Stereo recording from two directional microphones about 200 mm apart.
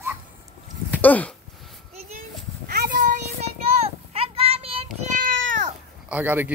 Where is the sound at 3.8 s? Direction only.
30° right (ahead or behind).